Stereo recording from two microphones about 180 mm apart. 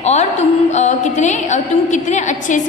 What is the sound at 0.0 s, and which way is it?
A woman's voice, 40° left (ahead or behind).